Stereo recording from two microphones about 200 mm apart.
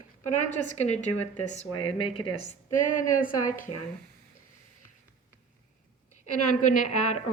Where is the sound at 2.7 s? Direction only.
40° left (ahead or behind).